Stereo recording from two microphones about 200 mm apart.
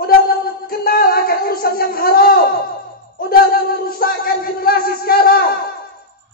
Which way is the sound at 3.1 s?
50° left (ahead or behind).